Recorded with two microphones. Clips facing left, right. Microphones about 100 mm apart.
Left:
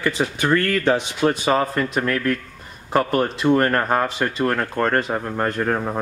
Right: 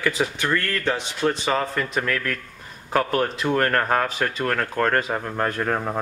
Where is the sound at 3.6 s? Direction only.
15° left (ahead or behind).